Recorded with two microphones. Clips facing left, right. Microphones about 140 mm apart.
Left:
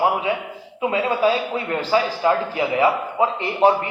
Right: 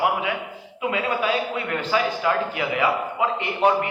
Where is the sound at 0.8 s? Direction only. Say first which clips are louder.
Left 5 dB; 30° left (ahead or behind).